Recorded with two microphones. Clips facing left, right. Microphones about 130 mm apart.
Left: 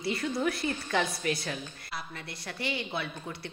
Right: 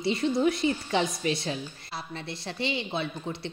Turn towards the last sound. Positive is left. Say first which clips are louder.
# right 5 dB
turn(degrees=-25)  # may be behind; listen again after turning